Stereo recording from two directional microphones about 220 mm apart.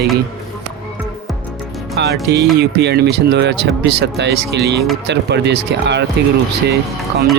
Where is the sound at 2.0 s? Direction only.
50° right (ahead or behind).